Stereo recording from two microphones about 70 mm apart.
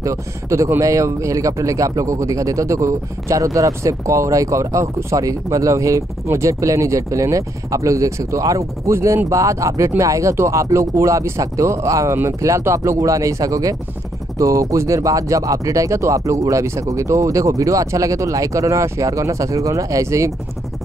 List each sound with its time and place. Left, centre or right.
0.0 s speech: right